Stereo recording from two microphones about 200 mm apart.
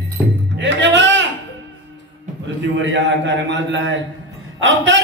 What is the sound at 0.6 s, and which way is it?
Music, 65° right (ahead or behind).